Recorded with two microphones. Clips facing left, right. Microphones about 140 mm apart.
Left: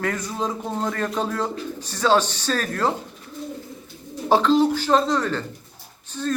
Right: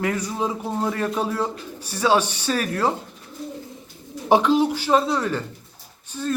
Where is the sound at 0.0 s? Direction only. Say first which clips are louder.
Right 2 dB; 10° right (ahead or behind).